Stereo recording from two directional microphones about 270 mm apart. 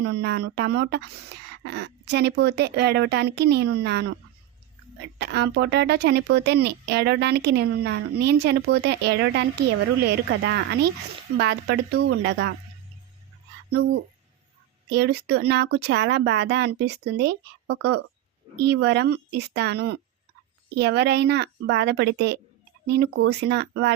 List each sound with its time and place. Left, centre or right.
0.0 s speech: right
5.2 s speech: right
13.7 s speech: right